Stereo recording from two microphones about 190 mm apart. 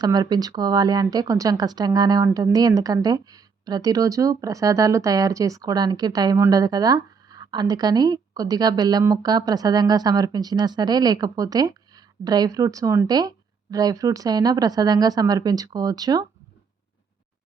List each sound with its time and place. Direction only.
0.0 s speech: 20° right (ahead or behind)